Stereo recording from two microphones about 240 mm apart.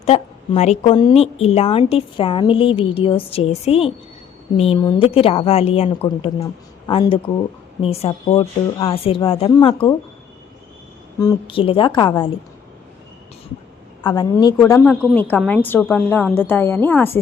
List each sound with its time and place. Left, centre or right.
0.0 s a woman's voice: left
11.2 s a woman's voice: centre
14.0 s a woman's voice: centre